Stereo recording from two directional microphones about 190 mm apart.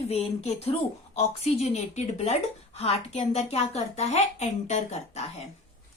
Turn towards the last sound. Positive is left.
turn(degrees=35)  # may be behind; listen again after turning